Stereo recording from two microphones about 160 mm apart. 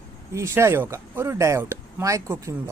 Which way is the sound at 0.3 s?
15° right (ahead or behind).